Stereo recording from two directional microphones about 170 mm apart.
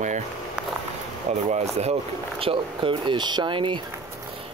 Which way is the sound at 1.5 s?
40° right (ahead or behind).